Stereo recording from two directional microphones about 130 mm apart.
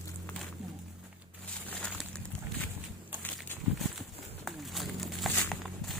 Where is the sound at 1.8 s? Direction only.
5° left (ahead or behind).